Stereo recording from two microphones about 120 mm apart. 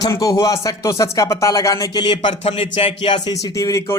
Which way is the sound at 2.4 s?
55° left (ahead or behind).